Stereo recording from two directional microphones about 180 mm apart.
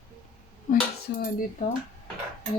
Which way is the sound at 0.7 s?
50° left (ahead or behind).